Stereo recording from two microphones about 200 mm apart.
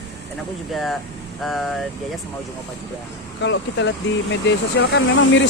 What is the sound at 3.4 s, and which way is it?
Speech, 65° left (ahead or behind).